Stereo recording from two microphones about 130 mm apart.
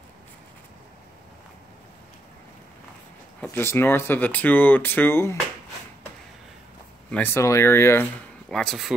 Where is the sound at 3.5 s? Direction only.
20° left (ahead or behind).